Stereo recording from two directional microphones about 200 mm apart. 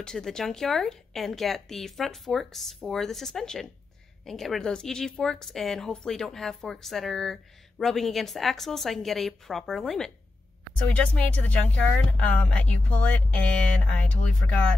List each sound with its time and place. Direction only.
0.0 s a woman's voice: 5° left (ahead or behind)